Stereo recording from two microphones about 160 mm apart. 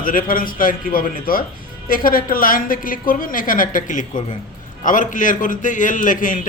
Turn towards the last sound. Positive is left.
turn(degrees=55)  # may be behind; listen again after turning